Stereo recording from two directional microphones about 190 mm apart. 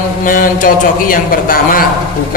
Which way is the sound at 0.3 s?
45° left (ahead or behind).